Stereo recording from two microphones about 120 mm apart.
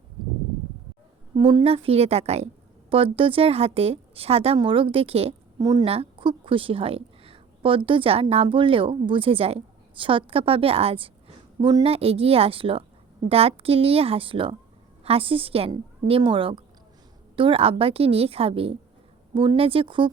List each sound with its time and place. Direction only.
1.4 s a woman's voice: 35° right (ahead or behind)
1.6 s a woman's voice: 55° right (ahead or behind)
2.9 s a woman's voice: 50° right (ahead or behind)
5.5 s speech: 30° right (ahead or behind)
5.8 s a woman's voice: 55° right (ahead or behind)